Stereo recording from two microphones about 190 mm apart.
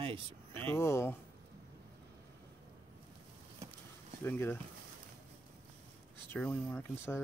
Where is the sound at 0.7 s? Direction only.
15° left (ahead or behind).